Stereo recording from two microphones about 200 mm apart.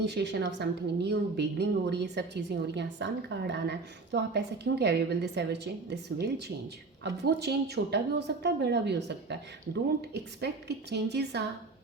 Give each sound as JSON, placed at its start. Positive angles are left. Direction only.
{"t": 0.0, "sound": "a woman's voice", "side_deg": -55}
{"t": 10.4, "sound": "a woman's voice", "side_deg": -55}